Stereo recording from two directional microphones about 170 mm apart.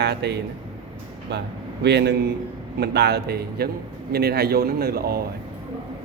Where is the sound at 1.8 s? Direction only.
90° right; by 5.2 s 65° right (ahead or behind).